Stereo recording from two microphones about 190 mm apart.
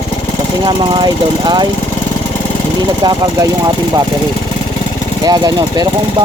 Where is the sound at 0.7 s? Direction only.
25° right (ahead or behind).